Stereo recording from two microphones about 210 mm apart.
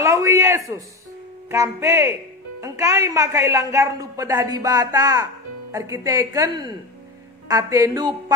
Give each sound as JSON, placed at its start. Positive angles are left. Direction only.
{"t": 0.0, "sound": "a woman's voice", "side_deg": -15}